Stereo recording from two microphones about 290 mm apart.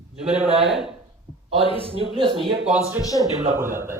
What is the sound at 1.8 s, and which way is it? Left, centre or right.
Speech, centre.